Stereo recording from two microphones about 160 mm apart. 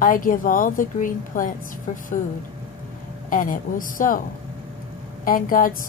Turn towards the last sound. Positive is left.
turn(degrees=60)  # may be behind; listen again after turning